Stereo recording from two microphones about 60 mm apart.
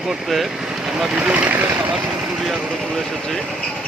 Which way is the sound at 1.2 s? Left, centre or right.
Right.